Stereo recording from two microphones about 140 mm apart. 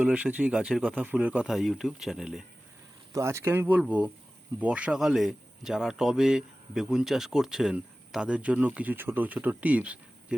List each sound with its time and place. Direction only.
0.0 s speech: 10° right (ahead or behind)
3.1 s speech: 20° right (ahead or behind)